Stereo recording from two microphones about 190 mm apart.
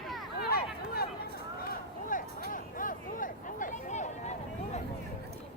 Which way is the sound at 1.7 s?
45° left (ahead or behind).